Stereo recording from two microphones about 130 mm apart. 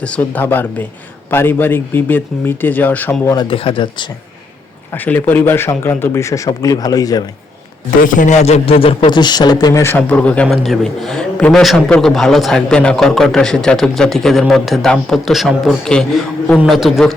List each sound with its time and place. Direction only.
0.0 s speech: 10° left (ahead or behind)
3.3 s speech: 45° left (ahead or behind)
4.9 s a man's voice: 15° left (ahead or behind); by 7.3 s 30° left (ahead or behind)
7.9 s a man's voice: 85° left; by 9.8 s 30° left (ahead or behind)
9.8 s a man's voice: 15° left (ahead or behind)